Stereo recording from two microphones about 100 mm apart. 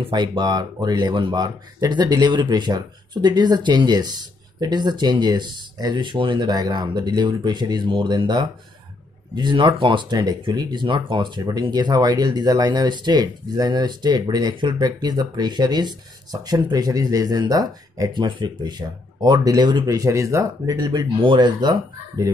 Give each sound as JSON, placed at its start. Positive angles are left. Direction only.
{"t": 0.1, "sound": "speech", "side_deg": -45}
{"t": 18.1, "sound": "speech", "side_deg": -50}